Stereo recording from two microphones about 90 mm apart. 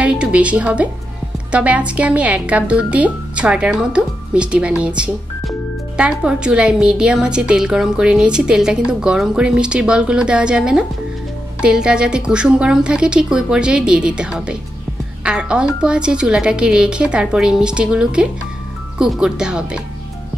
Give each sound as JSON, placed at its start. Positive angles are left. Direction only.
{"t": 0.0, "sound": "a woman's voice", "side_deg": -15}